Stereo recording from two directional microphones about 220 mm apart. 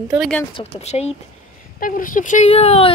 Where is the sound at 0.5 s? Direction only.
30° left (ahead or behind).